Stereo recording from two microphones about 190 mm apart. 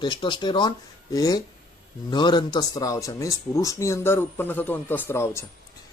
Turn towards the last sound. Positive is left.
turn(degrees=15)  # may be behind; listen again after turning